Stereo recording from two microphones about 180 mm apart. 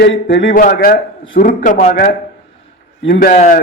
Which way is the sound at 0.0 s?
75° left (ahead or behind).